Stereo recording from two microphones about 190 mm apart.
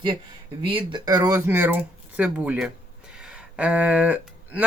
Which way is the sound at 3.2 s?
5° right (ahead or behind).